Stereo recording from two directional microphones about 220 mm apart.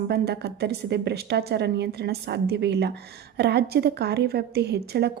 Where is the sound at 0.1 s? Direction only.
45° right (ahead or behind).